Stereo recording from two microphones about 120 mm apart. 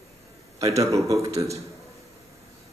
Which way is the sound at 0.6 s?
25° right (ahead or behind).